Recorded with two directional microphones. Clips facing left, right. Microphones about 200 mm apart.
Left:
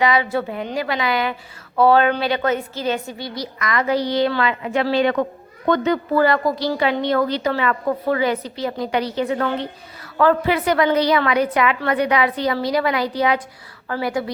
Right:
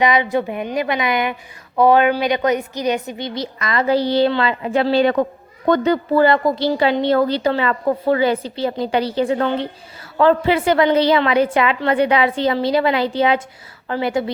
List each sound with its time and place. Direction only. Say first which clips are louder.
0.0 s a woman's voice: right 2 dB; 20° right (ahead or behind)